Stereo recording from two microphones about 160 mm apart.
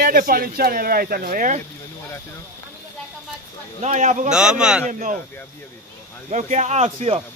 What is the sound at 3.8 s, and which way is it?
Speech, 45° right (ahead or behind).